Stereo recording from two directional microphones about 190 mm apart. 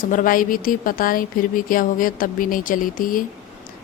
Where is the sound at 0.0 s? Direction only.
45° left (ahead or behind).